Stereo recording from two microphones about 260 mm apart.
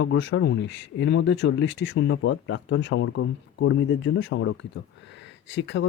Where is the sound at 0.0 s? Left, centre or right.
Left.